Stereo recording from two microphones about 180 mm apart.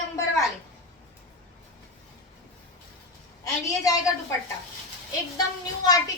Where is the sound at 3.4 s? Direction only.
20° left (ahead or behind).